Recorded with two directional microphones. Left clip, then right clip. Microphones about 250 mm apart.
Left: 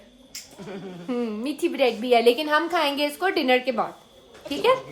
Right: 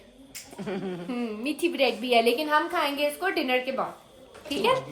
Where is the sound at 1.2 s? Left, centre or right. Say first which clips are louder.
Left 1 dB; centre.